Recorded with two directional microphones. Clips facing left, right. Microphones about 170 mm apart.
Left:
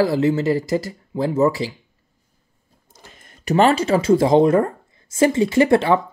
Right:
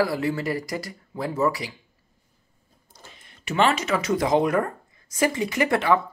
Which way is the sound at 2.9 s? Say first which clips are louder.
Left 2 dB; 45° left (ahead or behind).